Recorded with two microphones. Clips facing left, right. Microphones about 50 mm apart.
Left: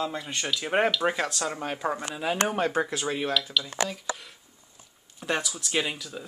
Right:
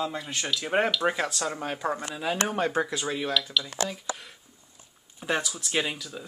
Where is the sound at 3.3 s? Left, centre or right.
Centre.